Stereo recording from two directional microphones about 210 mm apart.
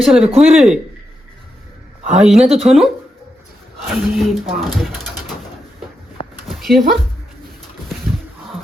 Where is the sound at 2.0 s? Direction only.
35° right (ahead or behind).